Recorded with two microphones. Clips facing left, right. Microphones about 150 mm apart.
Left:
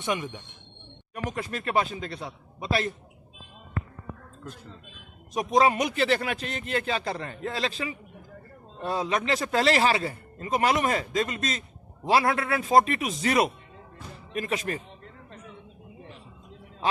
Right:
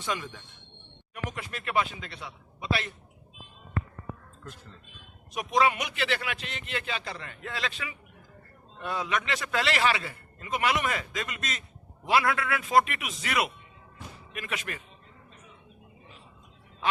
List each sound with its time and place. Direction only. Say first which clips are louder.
0.0 s speech: left 4 dB; 20° left (ahead or behind)
1.1 s speech: left 5 dB; 40° left (ahead or behind)
5.3 s speech: left 3 dB; 40° left (ahead or behind)